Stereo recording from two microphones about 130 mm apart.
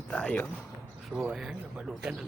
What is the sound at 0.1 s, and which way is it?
Basketball bounce, 10° left (ahead or behind).